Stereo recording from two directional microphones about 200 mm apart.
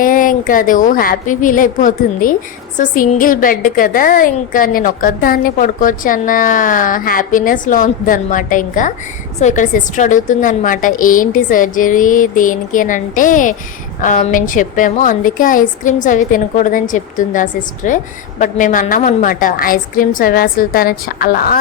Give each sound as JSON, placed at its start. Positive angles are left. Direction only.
{"t": 0.0, "sound": "a woman's voice", "side_deg": 40}